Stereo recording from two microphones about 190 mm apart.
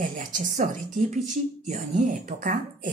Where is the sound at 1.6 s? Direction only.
40° right (ahead or behind).